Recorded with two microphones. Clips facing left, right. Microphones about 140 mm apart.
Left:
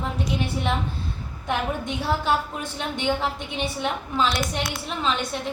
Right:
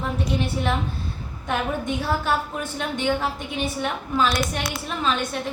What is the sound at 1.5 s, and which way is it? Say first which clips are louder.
A woman's voice: right 1 dB; 20° left (ahead or behind).